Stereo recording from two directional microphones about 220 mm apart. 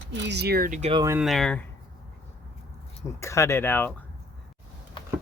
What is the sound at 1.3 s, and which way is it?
Speech, 5° left (ahead or behind).